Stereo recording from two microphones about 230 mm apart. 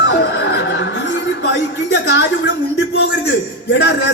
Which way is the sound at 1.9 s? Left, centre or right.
Left.